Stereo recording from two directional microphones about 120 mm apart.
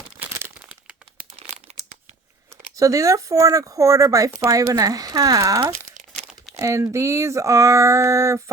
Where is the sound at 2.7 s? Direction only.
30° right (ahead or behind).